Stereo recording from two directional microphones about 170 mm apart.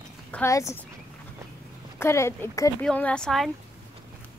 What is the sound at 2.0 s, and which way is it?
Speech, 15° left (ahead or behind).